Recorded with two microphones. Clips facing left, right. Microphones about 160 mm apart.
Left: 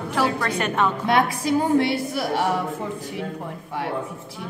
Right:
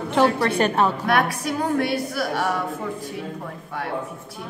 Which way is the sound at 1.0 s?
25° left (ahead or behind).